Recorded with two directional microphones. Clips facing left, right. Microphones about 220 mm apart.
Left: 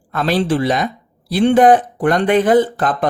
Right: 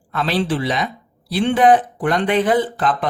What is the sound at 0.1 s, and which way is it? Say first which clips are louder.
Speech: left 4 dB; 45° left (ahead or behind).